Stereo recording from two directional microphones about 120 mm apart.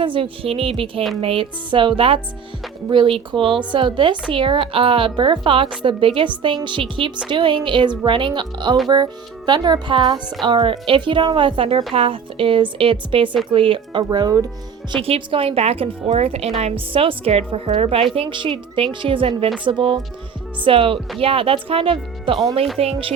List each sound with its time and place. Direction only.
0.0 s a woman's voice: 45° right (ahead or behind)
15.0 s a woman's voice: 50° right (ahead or behind)